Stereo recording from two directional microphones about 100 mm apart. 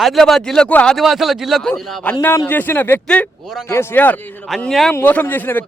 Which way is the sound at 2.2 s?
25° left (ahead or behind).